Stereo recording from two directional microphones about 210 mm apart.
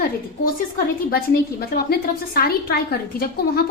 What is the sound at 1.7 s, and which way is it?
A woman's voice, 45° left (ahead or behind).